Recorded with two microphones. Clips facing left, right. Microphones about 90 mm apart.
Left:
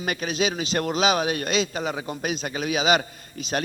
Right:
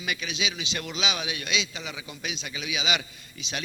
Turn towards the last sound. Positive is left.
turn(degrees=45)  # may be behind; listen again after turning